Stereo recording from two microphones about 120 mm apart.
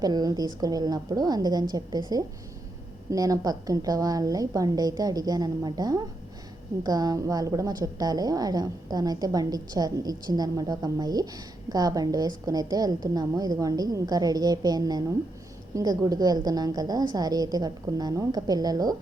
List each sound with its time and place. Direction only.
0.0 s a woman's voice: 35° right (ahead or behind)